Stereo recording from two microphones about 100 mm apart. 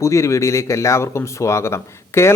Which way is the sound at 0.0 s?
30° left (ahead or behind).